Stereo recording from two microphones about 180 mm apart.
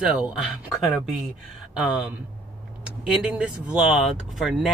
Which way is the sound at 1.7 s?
5° right (ahead or behind).